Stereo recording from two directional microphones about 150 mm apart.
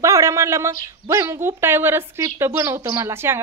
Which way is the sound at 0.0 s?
20° right (ahead or behind).